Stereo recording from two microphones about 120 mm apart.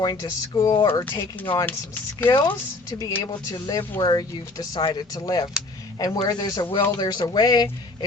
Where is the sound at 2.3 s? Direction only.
35° left (ahead or behind).